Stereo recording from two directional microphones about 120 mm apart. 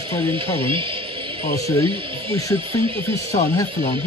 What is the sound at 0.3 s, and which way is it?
Speech, 45° right (ahead or behind).